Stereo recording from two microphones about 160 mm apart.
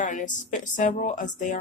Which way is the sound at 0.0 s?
50° left (ahead or behind).